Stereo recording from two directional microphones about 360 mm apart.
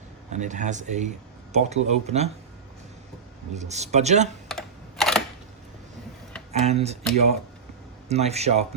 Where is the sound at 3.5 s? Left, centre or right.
Centre.